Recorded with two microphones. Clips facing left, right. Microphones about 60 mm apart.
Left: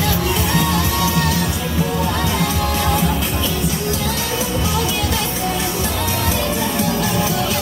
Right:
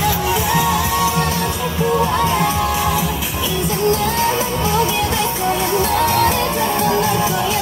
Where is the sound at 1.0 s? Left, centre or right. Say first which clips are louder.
Right 1 dB; right.